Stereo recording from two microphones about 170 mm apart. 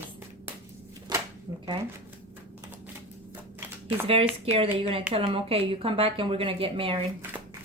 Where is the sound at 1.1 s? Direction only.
25° right (ahead or behind).